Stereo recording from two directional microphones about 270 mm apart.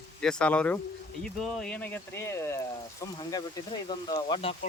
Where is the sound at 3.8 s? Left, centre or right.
Centre.